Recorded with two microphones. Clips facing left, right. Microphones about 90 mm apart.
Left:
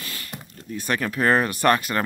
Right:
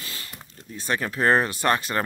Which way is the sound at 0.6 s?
25° right (ahead or behind).